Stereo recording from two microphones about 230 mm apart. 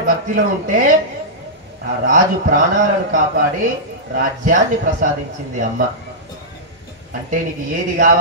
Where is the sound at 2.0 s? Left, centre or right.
Right.